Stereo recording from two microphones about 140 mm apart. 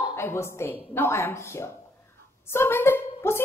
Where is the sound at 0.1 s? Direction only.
20° left (ahead or behind).